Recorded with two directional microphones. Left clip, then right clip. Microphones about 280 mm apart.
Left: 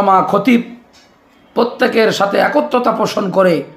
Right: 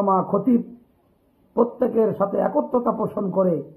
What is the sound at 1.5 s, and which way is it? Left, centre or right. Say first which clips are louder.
A man's voice: left 7 dB; left.